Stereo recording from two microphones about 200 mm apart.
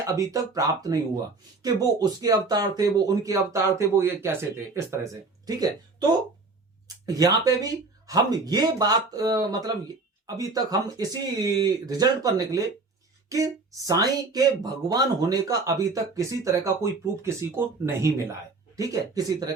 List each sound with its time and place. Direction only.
0.0 s speech: 15° right (ahead or behind)